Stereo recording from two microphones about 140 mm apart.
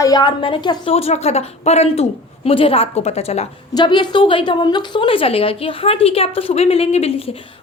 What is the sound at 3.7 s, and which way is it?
A woman's voice, 35° left (ahead or behind).